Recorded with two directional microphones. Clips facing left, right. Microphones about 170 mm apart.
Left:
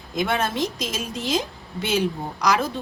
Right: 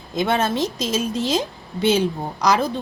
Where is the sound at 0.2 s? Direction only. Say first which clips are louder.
Right 3 dB; 30° right (ahead or behind).